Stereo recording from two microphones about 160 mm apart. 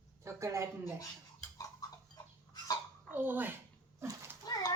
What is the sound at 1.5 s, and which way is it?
Tick-tock, 20° left (ahead or behind).